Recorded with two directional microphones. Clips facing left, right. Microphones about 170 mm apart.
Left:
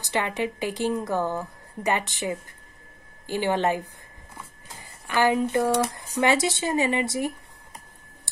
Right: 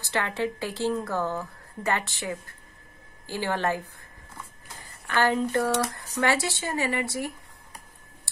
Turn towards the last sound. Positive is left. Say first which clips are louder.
# left 4 dB
turn(degrees=20)  # may be behind; listen again after turning